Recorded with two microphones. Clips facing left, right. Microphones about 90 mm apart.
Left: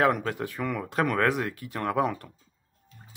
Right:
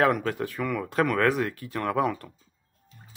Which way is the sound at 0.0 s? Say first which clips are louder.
Right 1 dB; 25° left (ahead or behind).